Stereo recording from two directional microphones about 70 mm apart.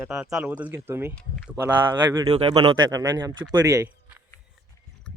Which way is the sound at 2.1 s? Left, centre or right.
Right.